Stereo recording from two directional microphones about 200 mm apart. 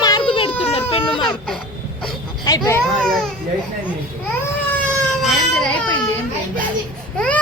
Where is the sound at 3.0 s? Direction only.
5° left (ahead or behind).